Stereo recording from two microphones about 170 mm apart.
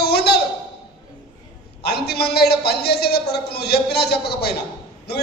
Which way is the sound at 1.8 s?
70° left (ahead or behind).